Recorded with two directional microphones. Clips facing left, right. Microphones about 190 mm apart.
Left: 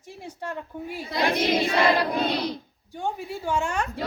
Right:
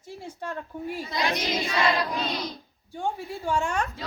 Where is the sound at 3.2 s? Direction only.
10° left (ahead or behind).